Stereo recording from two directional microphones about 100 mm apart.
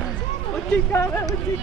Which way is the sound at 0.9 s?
25° left (ahead or behind).